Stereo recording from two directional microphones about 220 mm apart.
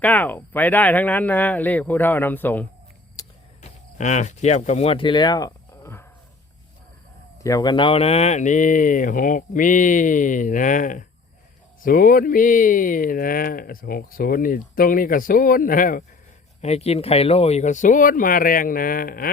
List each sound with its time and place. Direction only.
0.0 s speech: 5° left (ahead or behind)
3.2 s a sound: 15° left (ahead or behind)
3.6 s speech: 30° left (ahead or behind); by 6.1 s 10° left (ahead or behind)
7.4 s speech: 15° left (ahead or behind); by 19.3 s 40° left (ahead or behind)